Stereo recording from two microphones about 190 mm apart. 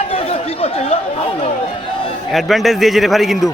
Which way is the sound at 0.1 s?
30° left (ahead or behind).